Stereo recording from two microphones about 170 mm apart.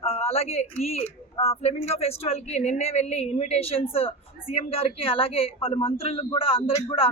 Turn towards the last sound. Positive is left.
turn(degrees=35)  # may be behind; listen again after turning